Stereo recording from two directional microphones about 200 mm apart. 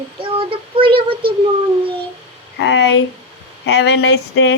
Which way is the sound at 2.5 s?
65° left (ahead or behind).